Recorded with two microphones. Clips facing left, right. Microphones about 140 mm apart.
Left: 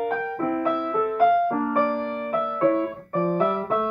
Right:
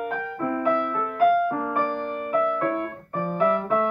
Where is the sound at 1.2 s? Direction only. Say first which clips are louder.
Even; 30° left (ahead or behind).